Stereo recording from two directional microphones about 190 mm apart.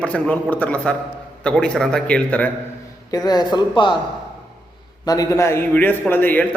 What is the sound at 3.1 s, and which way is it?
Speech, 20° left (ahead or behind).